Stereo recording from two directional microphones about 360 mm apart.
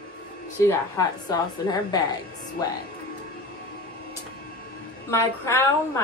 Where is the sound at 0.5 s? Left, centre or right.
Centre.